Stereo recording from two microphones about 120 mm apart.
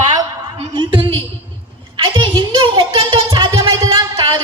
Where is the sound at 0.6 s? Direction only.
45° right (ahead or behind).